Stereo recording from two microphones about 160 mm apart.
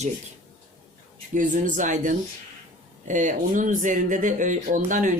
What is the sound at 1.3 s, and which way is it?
Speech, 50° right (ahead or behind).